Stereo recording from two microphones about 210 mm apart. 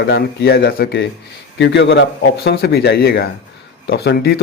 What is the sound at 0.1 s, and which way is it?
Speech, 50° left (ahead or behind).